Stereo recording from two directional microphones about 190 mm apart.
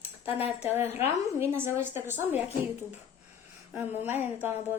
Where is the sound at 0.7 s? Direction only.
10° right (ahead or behind).